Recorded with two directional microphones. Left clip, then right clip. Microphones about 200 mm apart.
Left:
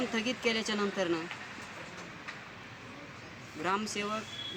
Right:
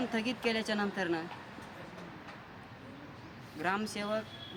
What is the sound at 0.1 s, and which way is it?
Speech, 25° right (ahead or behind).